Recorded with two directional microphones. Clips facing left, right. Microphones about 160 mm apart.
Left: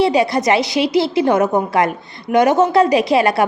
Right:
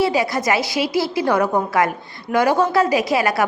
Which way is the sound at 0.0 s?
25° left (ahead or behind).